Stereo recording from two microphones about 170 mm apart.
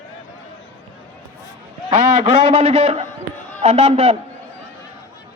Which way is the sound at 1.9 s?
40° right (ahead or behind).